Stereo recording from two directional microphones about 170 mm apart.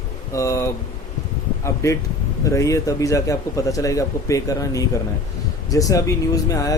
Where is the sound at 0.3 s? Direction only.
20° left (ahead or behind).